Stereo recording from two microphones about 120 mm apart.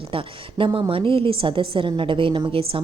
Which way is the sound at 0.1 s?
45° right (ahead or behind).